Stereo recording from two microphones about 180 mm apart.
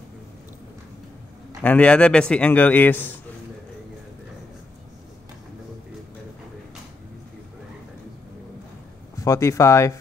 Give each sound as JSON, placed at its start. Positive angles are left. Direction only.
{"t": 1.6, "sound": "a man's voice", "side_deg": 10}
{"t": 9.2, "sound": "a man's voice", "side_deg": 15}